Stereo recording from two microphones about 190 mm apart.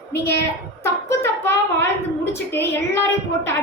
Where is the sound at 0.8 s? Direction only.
15° left (ahead or behind).